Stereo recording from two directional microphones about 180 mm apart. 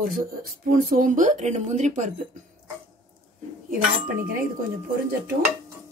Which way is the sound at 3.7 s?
50° right (ahead or behind).